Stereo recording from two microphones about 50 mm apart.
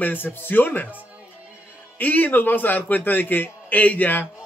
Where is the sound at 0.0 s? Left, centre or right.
Left.